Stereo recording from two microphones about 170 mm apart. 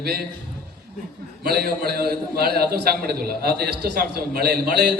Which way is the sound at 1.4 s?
65° right (ahead or behind).